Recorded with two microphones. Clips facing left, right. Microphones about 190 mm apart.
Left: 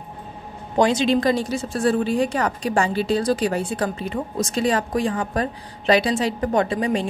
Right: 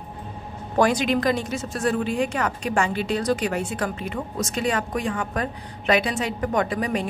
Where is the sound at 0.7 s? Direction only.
25° left (ahead or behind).